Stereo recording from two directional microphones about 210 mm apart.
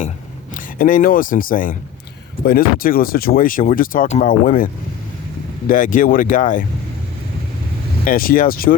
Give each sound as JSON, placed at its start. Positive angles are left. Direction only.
{"t": 0.5, "sound": "speech", "side_deg": 40}
{"t": 8.0, "sound": "speech", "side_deg": 45}